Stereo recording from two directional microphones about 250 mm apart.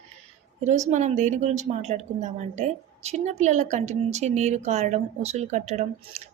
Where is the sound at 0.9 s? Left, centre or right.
Right.